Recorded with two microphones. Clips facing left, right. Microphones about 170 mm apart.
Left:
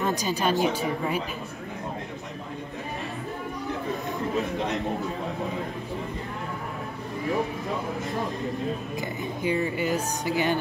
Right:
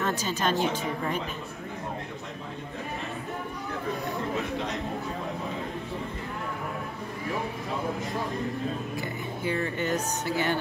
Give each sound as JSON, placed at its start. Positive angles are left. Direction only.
{"t": 0.0, "sound": "speech", "side_deg": 15}
{"t": 8.9, "sound": "speech", "side_deg": 15}